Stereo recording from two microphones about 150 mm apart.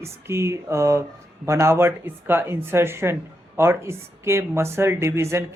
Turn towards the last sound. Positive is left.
turn(degrees=-20)  # may be behind; listen again after turning